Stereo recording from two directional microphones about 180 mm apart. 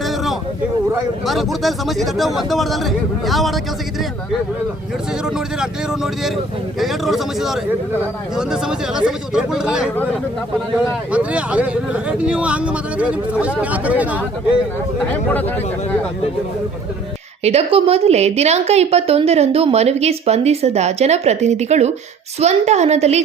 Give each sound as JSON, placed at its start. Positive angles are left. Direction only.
{"t": 0.9, "sound": "speech", "side_deg": 0}
{"t": 5.2, "sound": "speech", "side_deg": -5}
{"t": 11.1, "sound": "speech", "side_deg": -5}
{"t": 15.3, "sound": "speech", "side_deg": 10}
{"t": 17.4, "sound": "a woman's voice", "side_deg": -35}